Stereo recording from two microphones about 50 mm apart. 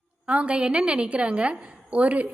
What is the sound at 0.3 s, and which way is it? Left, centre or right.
A woman's voice, right.